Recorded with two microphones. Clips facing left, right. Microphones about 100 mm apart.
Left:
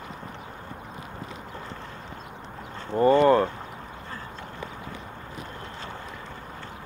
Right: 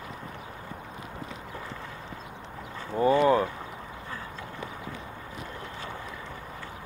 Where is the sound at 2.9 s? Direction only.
5° right (ahead or behind).